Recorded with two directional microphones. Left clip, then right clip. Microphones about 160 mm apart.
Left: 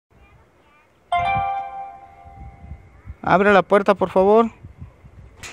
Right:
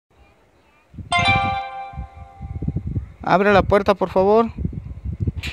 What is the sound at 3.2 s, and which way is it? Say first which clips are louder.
Speech: left 1 dB; centre (ahead or behind).